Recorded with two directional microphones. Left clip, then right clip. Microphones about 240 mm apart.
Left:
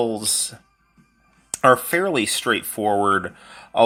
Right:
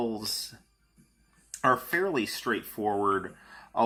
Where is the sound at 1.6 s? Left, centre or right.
Left.